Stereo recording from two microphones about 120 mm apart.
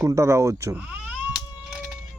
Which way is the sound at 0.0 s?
25° right (ahead or behind).